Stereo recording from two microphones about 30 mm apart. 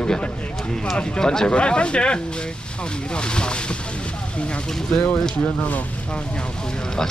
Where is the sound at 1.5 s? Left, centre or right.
Left.